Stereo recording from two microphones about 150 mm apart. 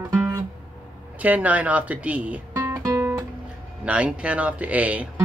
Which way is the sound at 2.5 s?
20° right (ahead or behind).